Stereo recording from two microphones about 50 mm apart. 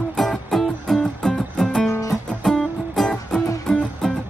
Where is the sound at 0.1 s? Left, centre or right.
Centre.